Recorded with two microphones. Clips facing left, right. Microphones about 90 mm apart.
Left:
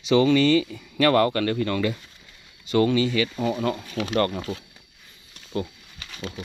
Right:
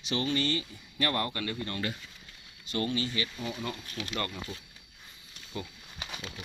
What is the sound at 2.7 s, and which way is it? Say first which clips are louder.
Speech: left 11 dB; 90° left.